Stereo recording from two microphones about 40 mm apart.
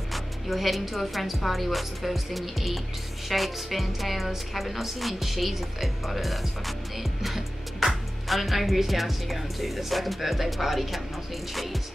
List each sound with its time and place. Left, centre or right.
0.1 s a woman's voice: centre